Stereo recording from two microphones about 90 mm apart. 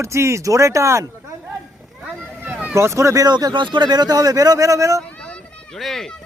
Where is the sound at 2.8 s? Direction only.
35° right (ahead or behind).